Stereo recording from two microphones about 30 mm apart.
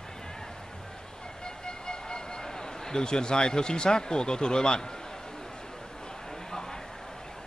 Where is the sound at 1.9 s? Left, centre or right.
Left.